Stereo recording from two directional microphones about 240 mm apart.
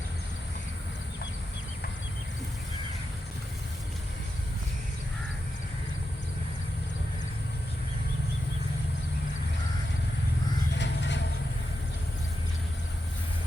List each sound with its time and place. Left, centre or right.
10.8 s vehicle: left